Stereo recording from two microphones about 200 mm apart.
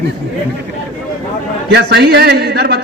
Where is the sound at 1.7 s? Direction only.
55° right (ahead or behind).